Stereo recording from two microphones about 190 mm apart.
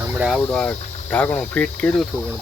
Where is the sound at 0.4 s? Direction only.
5° left (ahead or behind).